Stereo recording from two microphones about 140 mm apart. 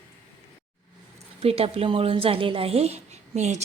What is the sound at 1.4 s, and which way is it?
A woman's voice, 45° right (ahead or behind).